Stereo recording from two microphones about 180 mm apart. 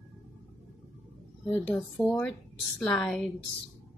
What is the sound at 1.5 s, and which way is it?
A woman's voice, 10° left (ahead or behind).